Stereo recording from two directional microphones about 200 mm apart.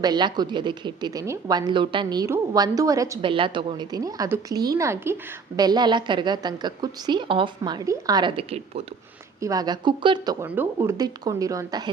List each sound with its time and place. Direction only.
0.0 s a woman's voice: 20° right (ahead or behind)
9.4 s a woman's voice: 20° right (ahead or behind)
10.4 s a woman's voice: 10° right (ahead or behind)